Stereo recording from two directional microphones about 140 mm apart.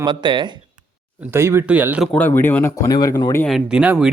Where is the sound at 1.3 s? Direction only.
15° right (ahead or behind).